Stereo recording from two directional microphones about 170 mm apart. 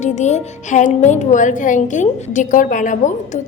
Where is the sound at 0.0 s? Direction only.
45° left (ahead or behind).